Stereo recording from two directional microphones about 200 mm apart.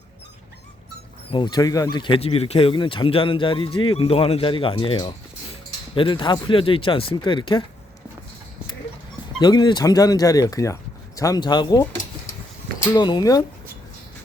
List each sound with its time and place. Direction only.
1.3 s speech: 20° left (ahead or behind)
9.4 s speech: 20° left (ahead or behind)
12.9 s speech: 20° left (ahead or behind)